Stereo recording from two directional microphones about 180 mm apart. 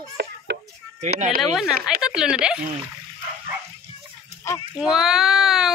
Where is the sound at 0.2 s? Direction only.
70° right (ahead or behind).